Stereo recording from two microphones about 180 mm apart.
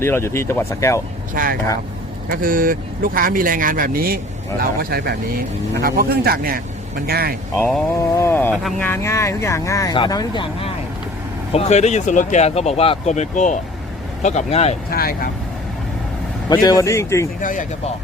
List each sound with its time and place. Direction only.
0.0 s speech: 15° left (ahead or behind)
1.3 s speech: 50° right (ahead or behind)
8.1 s speech: 15° left (ahead or behind)
11.5 s speech: 40° left (ahead or behind)
14.8 s speech: 55° left (ahead or behind)
16.5 s speech: 20° left (ahead or behind)
17.4 s speech: 45° left (ahead or behind)